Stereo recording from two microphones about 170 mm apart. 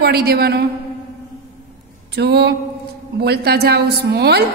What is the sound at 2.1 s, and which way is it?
A woman's voice, 75° right (ahead or behind).